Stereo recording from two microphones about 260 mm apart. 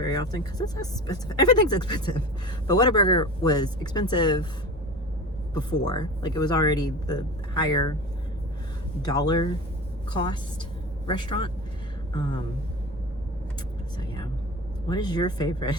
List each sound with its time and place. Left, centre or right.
0.0 s speech: centre
5.5 s speech: centre
9.0 s speech: centre
14.8 s speech: centre